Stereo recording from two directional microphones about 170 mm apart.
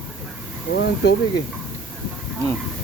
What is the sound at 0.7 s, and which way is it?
Speech, 90° left.